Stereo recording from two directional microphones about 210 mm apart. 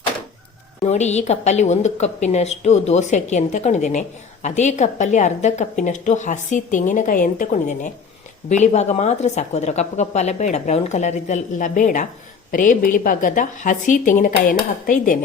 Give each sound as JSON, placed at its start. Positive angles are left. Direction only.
{"t": 0.9, "sound": "a woman's voice", "side_deg": 30}